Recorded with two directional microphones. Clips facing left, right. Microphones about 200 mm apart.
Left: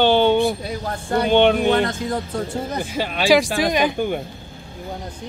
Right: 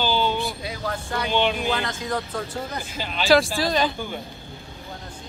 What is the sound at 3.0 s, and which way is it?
Speech, 65° left (ahead or behind).